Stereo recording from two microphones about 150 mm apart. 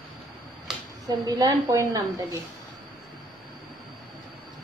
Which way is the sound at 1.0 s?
20° right (ahead or behind).